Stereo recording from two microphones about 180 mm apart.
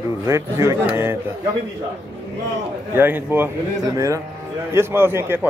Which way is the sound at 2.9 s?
10° right (ahead or behind).